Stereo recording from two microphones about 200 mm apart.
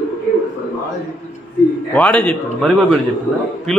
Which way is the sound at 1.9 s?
5° left (ahead or behind).